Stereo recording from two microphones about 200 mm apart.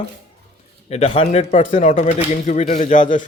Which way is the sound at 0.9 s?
30° left (ahead or behind).